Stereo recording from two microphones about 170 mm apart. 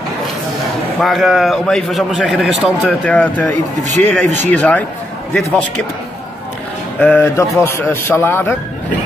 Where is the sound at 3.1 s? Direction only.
10° left (ahead or behind).